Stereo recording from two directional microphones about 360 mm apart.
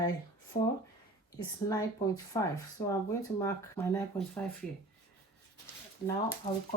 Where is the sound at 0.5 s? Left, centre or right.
Centre.